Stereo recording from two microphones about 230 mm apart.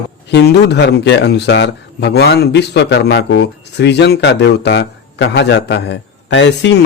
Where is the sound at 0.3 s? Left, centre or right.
Left.